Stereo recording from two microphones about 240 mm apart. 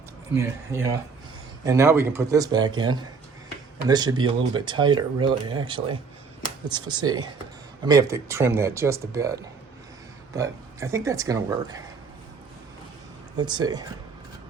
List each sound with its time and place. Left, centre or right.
0.3 s speech: centre
13.3 s speech: centre